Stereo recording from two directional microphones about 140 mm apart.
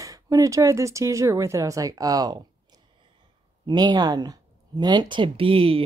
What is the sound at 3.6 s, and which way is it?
Speech, 30° right (ahead or behind).